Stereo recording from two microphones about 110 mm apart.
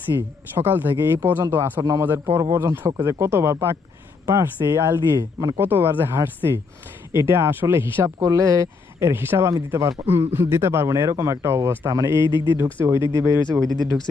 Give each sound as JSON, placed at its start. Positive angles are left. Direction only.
{"t": 0.1, "sound": "speech", "side_deg": -20}
{"t": 5.1, "sound": "speech", "side_deg": -35}
{"t": 5.5, "sound": "speech", "side_deg": -20}